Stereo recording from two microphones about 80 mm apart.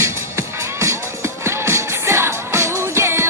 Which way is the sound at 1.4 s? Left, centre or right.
Right.